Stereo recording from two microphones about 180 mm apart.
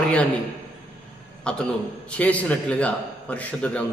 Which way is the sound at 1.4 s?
5° left (ahead or behind).